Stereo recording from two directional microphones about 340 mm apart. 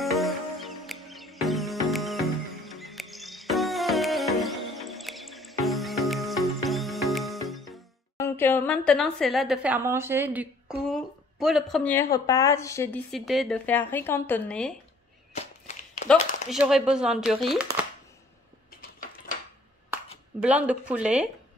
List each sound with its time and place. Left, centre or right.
0.0 s music: centre
7.7 s a woman's voice: centre
15.3 s walk: centre
16.1 s a woman's voice: centre
18.8 s a sound: left
20.4 s a woman's voice: centre